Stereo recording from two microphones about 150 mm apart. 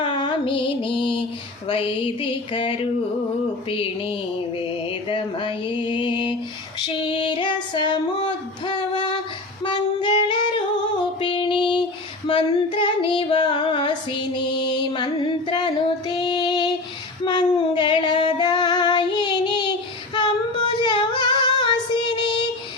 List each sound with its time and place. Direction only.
0.0 s music: 35° left (ahead or behind)
1.6 s mantra: 35° left (ahead or behind)
7.0 s female singing: 35° left (ahead or behind)
11.2 s music: 35° left (ahead or behind)
12.3 s female singing: 35° left (ahead or behind)